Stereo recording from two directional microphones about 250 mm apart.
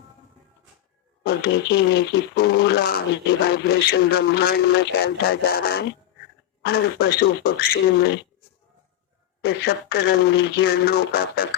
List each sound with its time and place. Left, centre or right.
1.2 s speech: left
9.4 s speech: left